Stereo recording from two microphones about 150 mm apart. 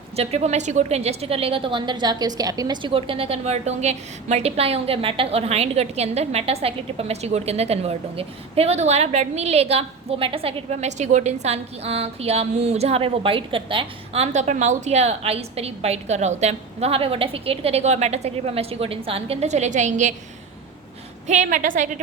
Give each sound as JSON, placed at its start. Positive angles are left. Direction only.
{"t": 0.2, "sound": "a woman's voice", "side_deg": -45}
{"t": 21.2, "sound": "a woman's voice", "side_deg": -55}